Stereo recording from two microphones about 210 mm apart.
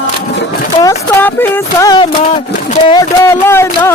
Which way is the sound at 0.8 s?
15° left (ahead or behind).